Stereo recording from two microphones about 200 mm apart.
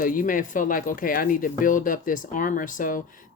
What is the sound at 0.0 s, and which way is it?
Speech, 45° left (ahead or behind).